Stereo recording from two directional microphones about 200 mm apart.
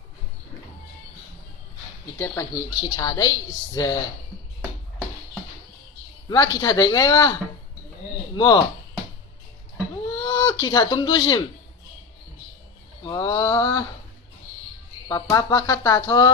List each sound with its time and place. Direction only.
2.1 s a woman's voice: 15° left (ahead or behind)
6.2 s speech: 20° left (ahead or behind)
8.4 s a woman's voice: 20° left (ahead or behind)
10.2 s speech: 15° left (ahead or behind)
13.0 s a woman's voice: 20° left (ahead or behind)
15.0 s speech: 20° left (ahead or behind)